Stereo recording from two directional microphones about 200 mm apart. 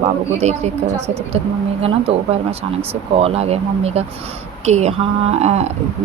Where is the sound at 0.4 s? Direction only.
30° right (ahead or behind).